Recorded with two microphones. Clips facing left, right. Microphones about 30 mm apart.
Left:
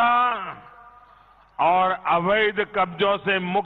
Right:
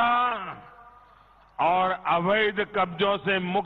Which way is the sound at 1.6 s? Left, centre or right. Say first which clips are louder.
Left 4 dB; centre.